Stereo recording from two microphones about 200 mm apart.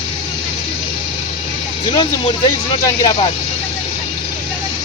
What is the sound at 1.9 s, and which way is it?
Speech, 20° left (ahead or behind).